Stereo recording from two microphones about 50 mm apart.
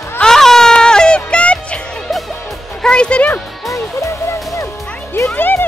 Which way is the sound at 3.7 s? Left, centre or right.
Left.